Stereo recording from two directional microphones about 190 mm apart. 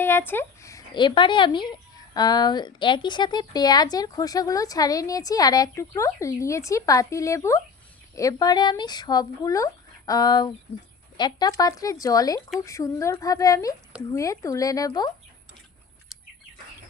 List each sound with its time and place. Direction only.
0.0 s speech: 10° left (ahead or behind)